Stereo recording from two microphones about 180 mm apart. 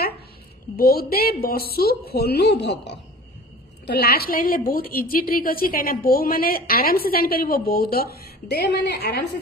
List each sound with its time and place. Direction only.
0.7 s a woman's voice: 55° left (ahead or behind)